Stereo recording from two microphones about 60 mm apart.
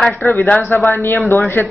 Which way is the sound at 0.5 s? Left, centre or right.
Left.